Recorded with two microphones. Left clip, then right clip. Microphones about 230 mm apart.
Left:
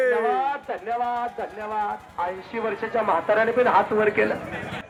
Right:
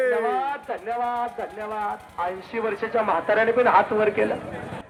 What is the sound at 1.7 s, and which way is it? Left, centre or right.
Speech, centre.